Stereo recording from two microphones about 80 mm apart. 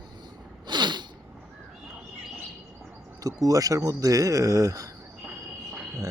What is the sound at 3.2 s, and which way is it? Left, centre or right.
Speech, right.